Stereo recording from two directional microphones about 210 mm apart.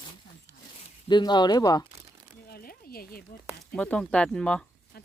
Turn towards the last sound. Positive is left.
turn(degrees=5)  # may be behind; listen again after turning